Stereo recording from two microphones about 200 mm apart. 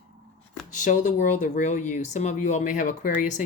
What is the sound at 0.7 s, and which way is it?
Speech, 40° left (ahead or behind).